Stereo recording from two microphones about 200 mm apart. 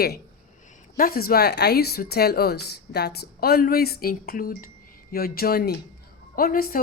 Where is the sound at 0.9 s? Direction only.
45° left (ahead or behind).